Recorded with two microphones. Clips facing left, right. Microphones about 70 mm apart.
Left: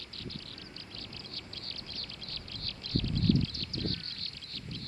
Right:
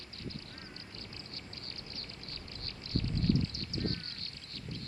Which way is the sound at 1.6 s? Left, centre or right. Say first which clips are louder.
Left 1 dB; right.